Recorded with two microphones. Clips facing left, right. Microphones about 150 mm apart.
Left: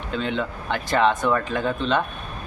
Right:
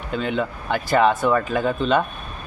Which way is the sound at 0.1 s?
10° right (ahead or behind).